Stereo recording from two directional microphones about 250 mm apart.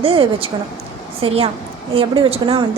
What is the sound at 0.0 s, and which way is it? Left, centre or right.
A woman's voice, right.